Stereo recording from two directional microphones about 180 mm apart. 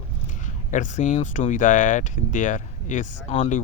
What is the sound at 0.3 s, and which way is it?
Speech, 45° left (ahead or behind).